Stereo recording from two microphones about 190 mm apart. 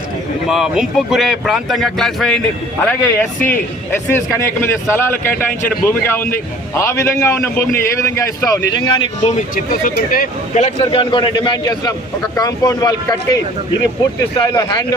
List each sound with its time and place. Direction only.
0.4 s a man's voice: centre (ahead or behind); by 9.4 s 30° left (ahead or behind)
9.8 s speech: 50° left (ahead or behind)
10.8 s speech: 25° left (ahead or behind)